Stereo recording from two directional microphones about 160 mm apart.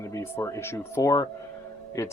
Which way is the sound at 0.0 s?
20° left (ahead or behind).